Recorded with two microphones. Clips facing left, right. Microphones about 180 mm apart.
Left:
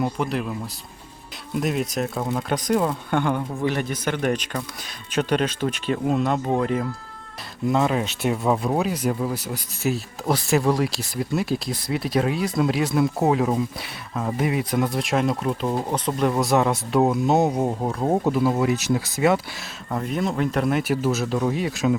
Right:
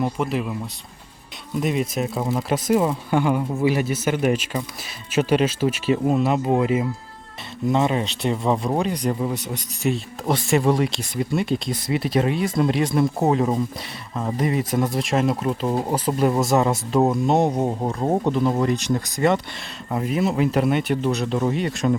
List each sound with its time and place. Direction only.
0.0 s speech: centre (ahead or behind)
1.5 s speech: centre (ahead or behind)
19.9 s speech: 5° right (ahead or behind)